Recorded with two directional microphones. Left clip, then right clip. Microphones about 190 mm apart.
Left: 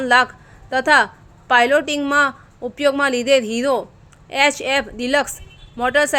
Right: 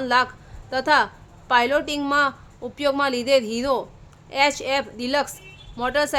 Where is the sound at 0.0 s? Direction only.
25° left (ahead or behind).